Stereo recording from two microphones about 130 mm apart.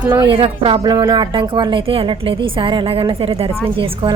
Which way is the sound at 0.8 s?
30° right (ahead or behind).